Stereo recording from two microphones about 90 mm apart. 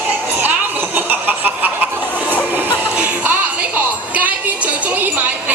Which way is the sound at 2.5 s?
20° right (ahead or behind).